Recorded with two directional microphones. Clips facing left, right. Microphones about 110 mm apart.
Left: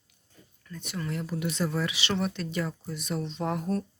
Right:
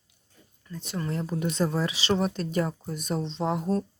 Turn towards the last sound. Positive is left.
turn(degrees=-20)  # may be behind; listen again after turning